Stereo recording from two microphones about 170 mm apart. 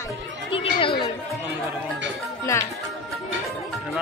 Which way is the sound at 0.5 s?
30° left (ahead or behind).